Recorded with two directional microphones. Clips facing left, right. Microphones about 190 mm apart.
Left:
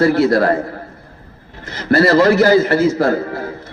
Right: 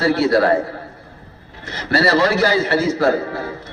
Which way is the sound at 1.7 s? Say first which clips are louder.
Left 5 dB; 50° left (ahead or behind).